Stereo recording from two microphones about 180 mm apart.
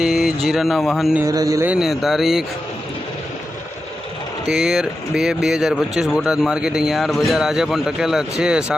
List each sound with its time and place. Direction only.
0.0 s speech: 5° right (ahead or behind)
1.2 s a man's voice: 20° right (ahead or behind)
1.7 s speech: centre (ahead or behind)
4.4 s speech: centre (ahead or behind)